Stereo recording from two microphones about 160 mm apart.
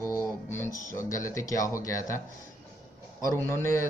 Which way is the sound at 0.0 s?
15° left (ahead or behind).